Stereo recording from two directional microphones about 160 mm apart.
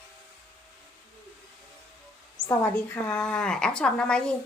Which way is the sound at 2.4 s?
25° left (ahead or behind).